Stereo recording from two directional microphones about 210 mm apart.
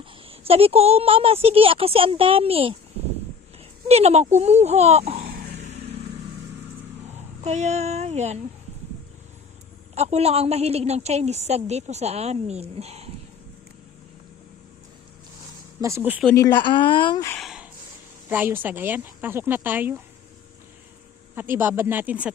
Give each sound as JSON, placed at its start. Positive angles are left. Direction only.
{"t": 0.0, "sound": "speech", "side_deg": -25}
{"t": 3.8, "sound": "a woman's voice", "side_deg": -30}
{"t": 5.2, "sound": "vehicle", "side_deg": -45}
{"t": 7.1, "sound": "speech", "side_deg": -35}
{"t": 9.9, "sound": "a woman's voice", "side_deg": -30}
{"t": 15.8, "sound": "speech", "side_deg": -15}
{"t": 16.2, "sound": "speech", "side_deg": 15}
{"t": 17.2, "sound": "a sound", "side_deg": 5}
{"t": 18.3, "sound": "speech", "side_deg": -10}
{"t": 21.3, "sound": "speech", "side_deg": -10}